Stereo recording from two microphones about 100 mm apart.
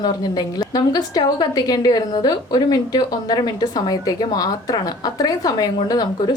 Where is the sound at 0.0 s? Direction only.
40° left (ahead or behind).